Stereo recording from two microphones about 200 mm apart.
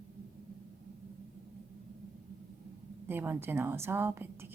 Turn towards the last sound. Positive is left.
turn(degrees=-10)  # may be behind; listen again after turning